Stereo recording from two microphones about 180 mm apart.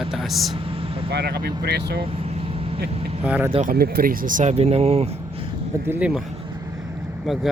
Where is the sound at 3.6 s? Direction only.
55° right (ahead or behind); by 5.1 s 35° right (ahead or behind).